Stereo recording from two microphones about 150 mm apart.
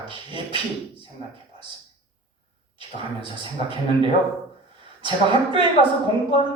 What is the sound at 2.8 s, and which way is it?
Speech, 35° right (ahead or behind).